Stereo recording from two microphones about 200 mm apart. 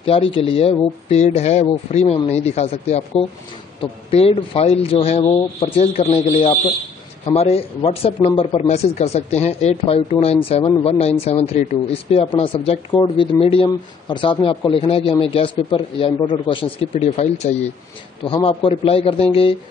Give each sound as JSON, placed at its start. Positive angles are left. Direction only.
{"t": 0.0, "sound": "speech", "side_deg": 30}